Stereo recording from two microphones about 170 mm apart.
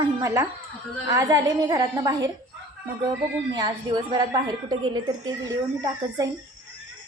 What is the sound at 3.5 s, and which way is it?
A woman's voice, 25° right (ahead or behind).